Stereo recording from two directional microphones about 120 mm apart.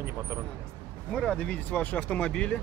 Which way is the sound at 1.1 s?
5° left (ahead or behind).